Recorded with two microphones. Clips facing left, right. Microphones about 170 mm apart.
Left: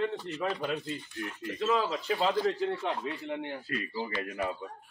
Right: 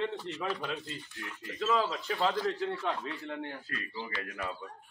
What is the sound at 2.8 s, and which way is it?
A man's voice, 20° left (ahead or behind).